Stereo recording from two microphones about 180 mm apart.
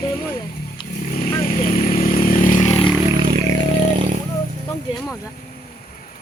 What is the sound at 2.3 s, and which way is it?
Vehicle, 45° left (ahead or behind).